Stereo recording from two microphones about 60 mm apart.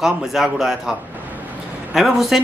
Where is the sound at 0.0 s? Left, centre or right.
Centre.